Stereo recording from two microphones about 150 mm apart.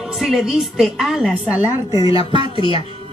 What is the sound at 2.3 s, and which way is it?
Speech, 35° right (ahead or behind).